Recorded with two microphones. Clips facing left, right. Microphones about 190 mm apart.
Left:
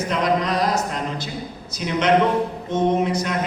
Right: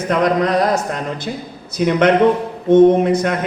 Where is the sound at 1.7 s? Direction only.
55° right (ahead or behind).